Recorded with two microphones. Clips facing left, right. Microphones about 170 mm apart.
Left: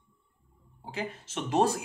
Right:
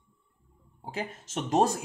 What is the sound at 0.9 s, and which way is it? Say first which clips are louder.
Speech: right 1 dB; 45° right (ahead or behind).